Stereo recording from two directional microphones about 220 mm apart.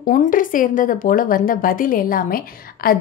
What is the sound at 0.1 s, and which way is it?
A woman's voice, 35° left (ahead or behind).